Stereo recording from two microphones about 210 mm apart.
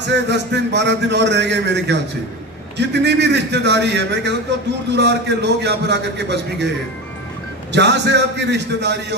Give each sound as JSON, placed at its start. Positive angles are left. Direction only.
{"t": 0.0, "sound": "speech", "side_deg": -55}
{"t": 7.7, "sound": "speech", "side_deg": -55}